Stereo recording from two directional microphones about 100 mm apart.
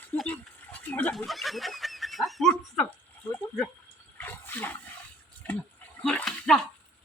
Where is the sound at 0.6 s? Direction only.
20° left (ahead or behind).